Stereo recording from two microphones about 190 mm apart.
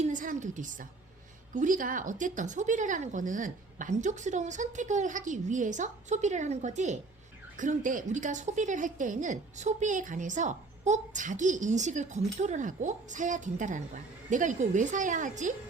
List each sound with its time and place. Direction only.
0.0 s a woman's voice: 45° right (ahead or behind)